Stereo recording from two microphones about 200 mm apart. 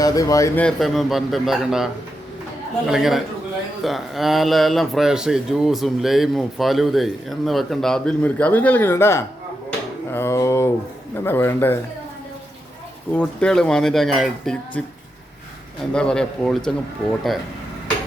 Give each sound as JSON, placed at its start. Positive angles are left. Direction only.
{"t": 0.0, "sound": "speech", "side_deg": 20}
{"t": 0.6, "sound": "speech", "side_deg": 0}
{"t": 10.1, "sound": "a sound", "side_deg": 15}
{"t": 11.2, "sound": "speech", "side_deg": 10}
{"t": 13.1, "sound": "speech", "side_deg": 5}